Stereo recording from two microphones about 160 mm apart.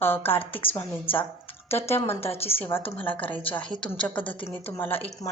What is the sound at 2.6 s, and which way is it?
Speech, 15° left (ahead or behind).